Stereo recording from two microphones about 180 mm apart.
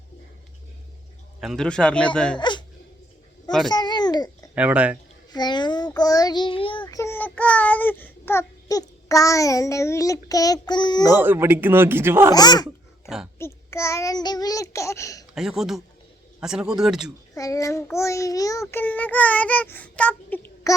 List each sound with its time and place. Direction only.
1.4 s a man's voice: centre (ahead or behind)
2.4 s speech: 25° left (ahead or behind)
3.7 s babbling: 25° left (ahead or behind)
4.5 s a man's voice: 5° right (ahead or behind)
5.3 s child singing: 25° left (ahead or behind)
11.2 s a man's voice: 10° right (ahead or behind)
12.3 s child singing: 20° left (ahead or behind)
15.4 s a man's voice: 5° right (ahead or behind)
17.3 s child singing: 20° left (ahead or behind)